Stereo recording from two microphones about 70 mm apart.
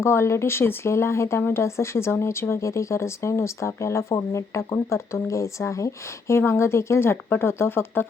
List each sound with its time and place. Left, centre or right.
0.0 s speech: left